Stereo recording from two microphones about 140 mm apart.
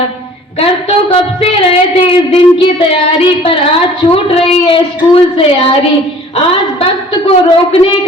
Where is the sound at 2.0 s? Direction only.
40° left (ahead or behind).